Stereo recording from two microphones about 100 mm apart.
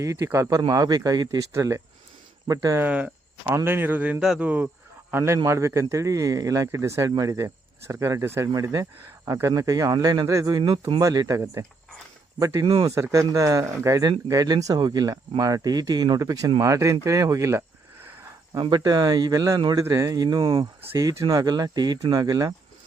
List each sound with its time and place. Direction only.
0.0 s speech: 30° right (ahead or behind)
2.7 s speech: 15° right (ahead or behind); by 12.6 s 35° right (ahead or behind)
12.6 s speech: 50° right (ahead or behind)
12.9 s speech: 30° right (ahead or behind)
18.7 s speech: 45° right (ahead or behind)
20.4 s speech: 60° right (ahead or behind)
20.9 s speech: 30° right (ahead or behind)